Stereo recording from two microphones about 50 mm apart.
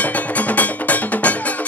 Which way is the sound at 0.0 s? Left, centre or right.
Left.